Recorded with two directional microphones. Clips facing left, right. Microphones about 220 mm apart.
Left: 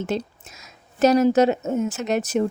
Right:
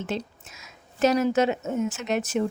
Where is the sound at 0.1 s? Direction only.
40° left (ahead or behind).